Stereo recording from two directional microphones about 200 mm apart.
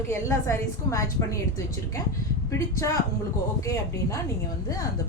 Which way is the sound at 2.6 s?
15° left (ahead or behind).